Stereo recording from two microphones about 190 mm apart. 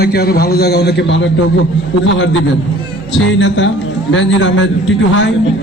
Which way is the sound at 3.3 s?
70° left (ahead or behind).